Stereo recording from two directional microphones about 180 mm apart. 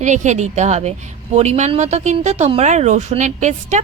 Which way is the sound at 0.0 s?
40° right (ahead or behind).